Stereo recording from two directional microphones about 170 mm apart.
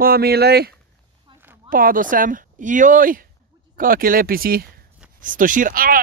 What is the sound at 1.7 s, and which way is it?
Speech, 55° right (ahead or behind).